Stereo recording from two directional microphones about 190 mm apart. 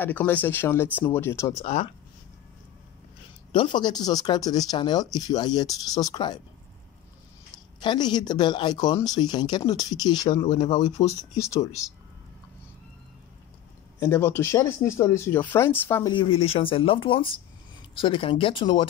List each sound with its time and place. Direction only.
0.0 s speech: 10° left (ahead or behind)
1.6 s speech: 40° left (ahead or behind)
3.5 s speech: 25° left (ahead or behind)
7.8 s speech: 25° left (ahead or behind)
11.3 s speech: 15° left (ahead or behind)
13.9 s speech: 10° left (ahead or behind)
16.1 s speech: 30° left (ahead or behind)